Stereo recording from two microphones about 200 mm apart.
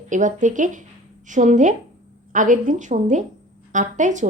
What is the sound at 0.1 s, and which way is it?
A woman's voice, 40° right (ahead or behind).